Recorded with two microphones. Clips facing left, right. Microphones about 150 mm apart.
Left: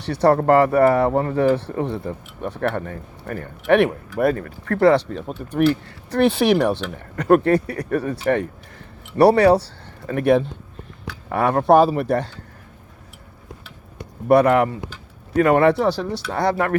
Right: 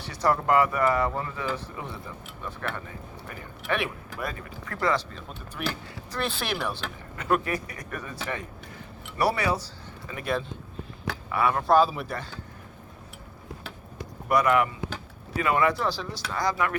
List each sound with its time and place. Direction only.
0.0 s speech: 65° left (ahead or behind); by 0.8 s 40° left (ahead or behind)
0.8 s speech: 65° left (ahead or behind)
7.2 s speech: 50° left (ahead or behind)
7.7 s speech: 35° left (ahead or behind)
8.0 s speech: 65° left (ahead or behind)
9.2 s speech: 55° left (ahead or behind)
9.5 s speech: 65° left (ahead or behind)
11.3 s speech: 45° left (ahead or behind); by 12.4 s 70° left (ahead or behind)
14.3 s speech: 35° left (ahead or behind)
15.4 s speech: 55° left (ahead or behind)